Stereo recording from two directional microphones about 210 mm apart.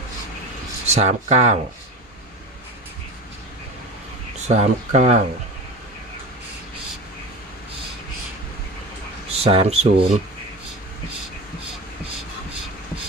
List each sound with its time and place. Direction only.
0.9 s speech: 30° right (ahead or behind)
4.4 s speech: 35° right (ahead or behind)
9.4 s speech: 30° right (ahead or behind)